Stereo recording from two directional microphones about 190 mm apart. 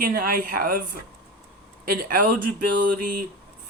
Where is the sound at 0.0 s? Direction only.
50° right (ahead or behind).